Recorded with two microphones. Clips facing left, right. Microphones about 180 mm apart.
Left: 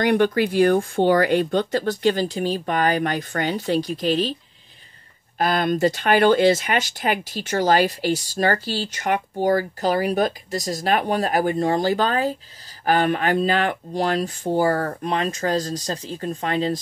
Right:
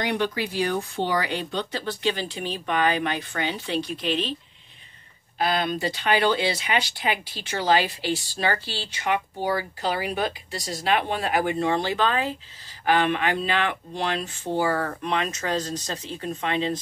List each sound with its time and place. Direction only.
0.0 s speech: 55° left (ahead or behind)
5.4 s speech: 45° left (ahead or behind)